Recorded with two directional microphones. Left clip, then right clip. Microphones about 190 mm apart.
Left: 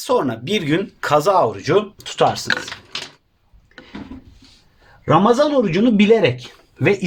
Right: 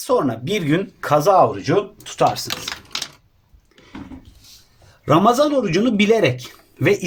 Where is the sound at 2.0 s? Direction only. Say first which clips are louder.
Left 1 dB; 50° left (ahead or behind).